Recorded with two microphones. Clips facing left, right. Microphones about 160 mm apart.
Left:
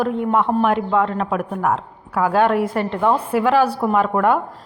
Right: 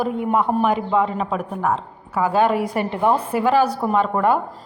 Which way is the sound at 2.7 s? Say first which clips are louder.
Left 1 dB; 15° right (ahead or behind).